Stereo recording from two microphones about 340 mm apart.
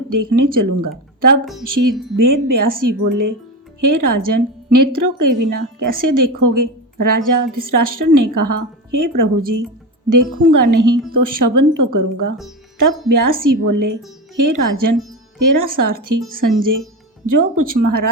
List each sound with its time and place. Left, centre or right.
0.1 s a woman's voice: right
17.2 s a woman's voice: right